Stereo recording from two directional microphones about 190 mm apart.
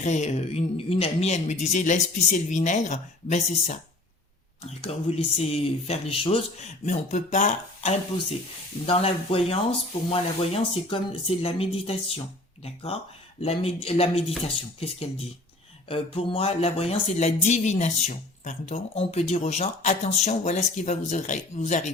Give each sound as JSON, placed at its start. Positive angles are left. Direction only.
{"t": 0.0, "sound": "speech", "side_deg": 40}